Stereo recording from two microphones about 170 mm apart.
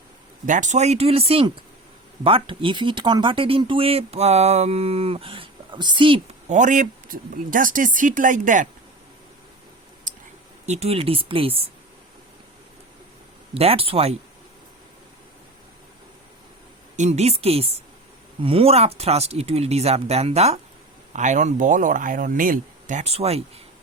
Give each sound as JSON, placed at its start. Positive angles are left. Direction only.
{"t": 0.4, "sound": "speech", "side_deg": -45}
{"t": 6.5, "sound": "speech", "side_deg": -45}
{"t": 10.7, "sound": "speech", "side_deg": -35}
{"t": 13.5, "sound": "speech", "side_deg": -35}
{"t": 17.0, "sound": "speech", "side_deg": -40}